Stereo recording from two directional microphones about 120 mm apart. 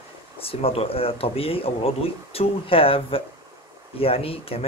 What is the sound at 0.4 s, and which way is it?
Speech, 50° left (ahead or behind).